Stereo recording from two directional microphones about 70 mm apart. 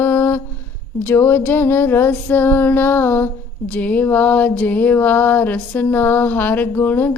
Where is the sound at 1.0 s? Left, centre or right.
Left.